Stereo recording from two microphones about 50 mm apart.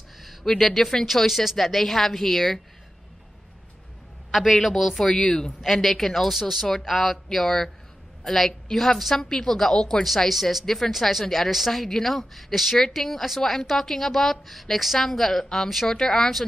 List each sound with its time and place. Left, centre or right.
0.2 s a woman's voice: centre
4.3 s a woman's voice: centre
10.0 s a woman's voice: centre